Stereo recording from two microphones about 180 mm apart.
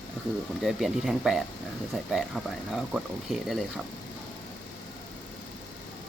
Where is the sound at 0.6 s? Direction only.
Centre (ahead or behind).